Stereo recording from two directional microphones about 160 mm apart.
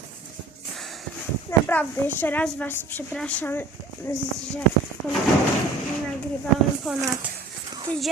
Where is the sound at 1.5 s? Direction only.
10° left (ahead or behind).